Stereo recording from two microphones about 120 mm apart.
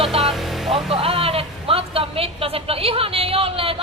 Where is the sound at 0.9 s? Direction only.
50° right (ahead or behind).